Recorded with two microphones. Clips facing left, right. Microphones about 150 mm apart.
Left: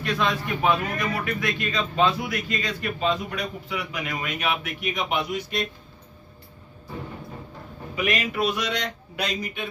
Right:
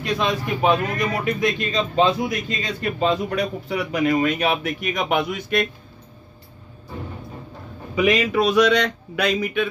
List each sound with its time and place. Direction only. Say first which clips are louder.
0.0 s speech: right 3 dB; 20° right (ahead or behind)
3.0 s a man's voice: right 6 dB; 40° right (ahead or behind); by 5.7 s 55° right (ahead or behind)
8.4 s speech: right 9 dB; 85° right; by 9.7 s 65° right (ahead or behind)